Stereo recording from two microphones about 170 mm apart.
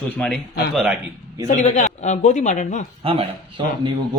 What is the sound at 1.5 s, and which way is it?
Speech, 45° left (ahead or behind).